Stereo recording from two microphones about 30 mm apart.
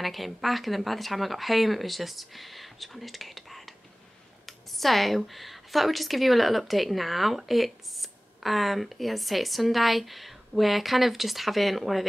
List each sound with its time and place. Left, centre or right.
0.0 s speech: centre